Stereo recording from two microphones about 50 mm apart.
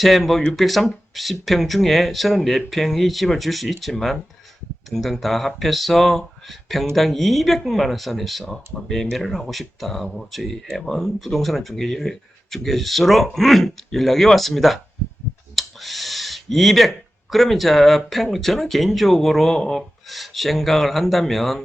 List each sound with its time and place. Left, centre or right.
0.0 s speech: centre
15.5 s clicking: centre
17.3 s speech: centre